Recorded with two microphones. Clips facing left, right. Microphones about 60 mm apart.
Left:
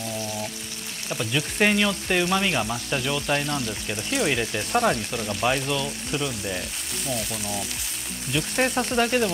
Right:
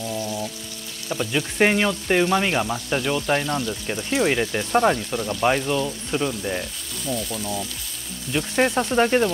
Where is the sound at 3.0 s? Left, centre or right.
Right.